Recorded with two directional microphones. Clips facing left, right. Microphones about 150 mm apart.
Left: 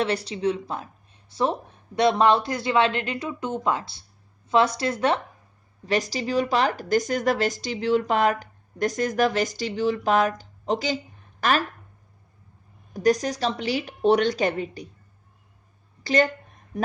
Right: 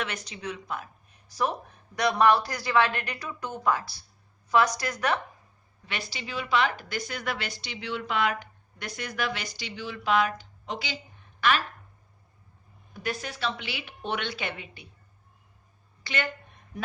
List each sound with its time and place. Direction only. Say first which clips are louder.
0.0 s speech: left 10 dB; 30° left (ahead or behind)
5.8 s speech: left 13 dB; 40° left (ahead or behind)
12.9 s speech: left 13 dB; 40° left (ahead or behind)
16.0 s a sound: left 11 dB; 40° left (ahead or behind)